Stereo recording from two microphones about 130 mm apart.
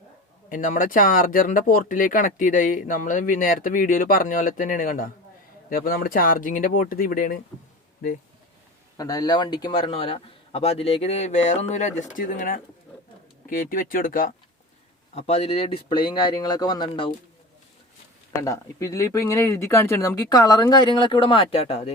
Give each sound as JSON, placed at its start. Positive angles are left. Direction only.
{"t": 0.5, "sound": "speech", "side_deg": 90}
{"t": 9.0, "sound": "a man's voice", "side_deg": 30}
{"t": 15.1, "sound": "speech", "side_deg": 50}
{"t": 18.4, "sound": "a man's voice", "side_deg": 25}